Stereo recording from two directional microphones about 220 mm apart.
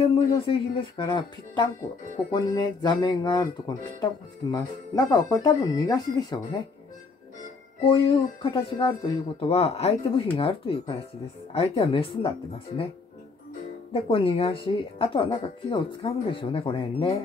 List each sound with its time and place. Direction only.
0.0 s speech: 25° left (ahead or behind)
7.8 s speech: 25° left (ahead or behind)
13.9 s speech: 25° left (ahead or behind)